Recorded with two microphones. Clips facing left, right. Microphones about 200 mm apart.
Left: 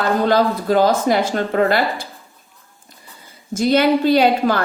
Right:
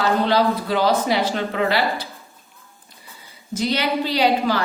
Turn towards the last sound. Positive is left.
turn(degrees=50)  # may be behind; listen again after turning